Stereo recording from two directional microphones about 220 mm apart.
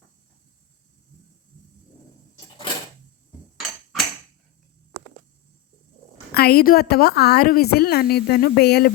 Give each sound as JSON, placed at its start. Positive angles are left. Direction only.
{"t": 6.3, "sound": "a woman's voice", "side_deg": 45}